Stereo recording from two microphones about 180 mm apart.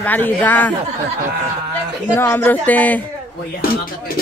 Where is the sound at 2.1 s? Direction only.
10° left (ahead or behind).